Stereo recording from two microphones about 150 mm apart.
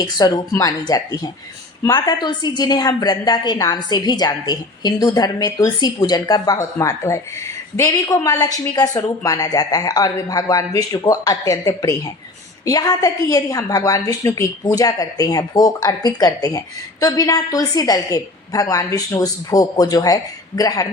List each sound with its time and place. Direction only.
0.0 s a woman's voice: 25° left (ahead or behind)